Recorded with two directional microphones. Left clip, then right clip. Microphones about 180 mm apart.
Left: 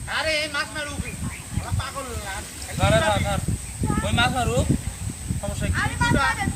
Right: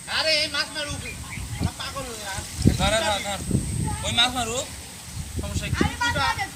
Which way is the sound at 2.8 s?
45° left (ahead or behind).